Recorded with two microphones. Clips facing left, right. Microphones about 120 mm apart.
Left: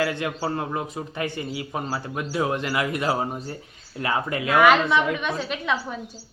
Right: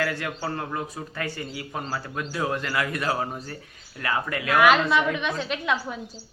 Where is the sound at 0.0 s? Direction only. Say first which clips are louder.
Left 3 dB; 20° left (ahead or behind).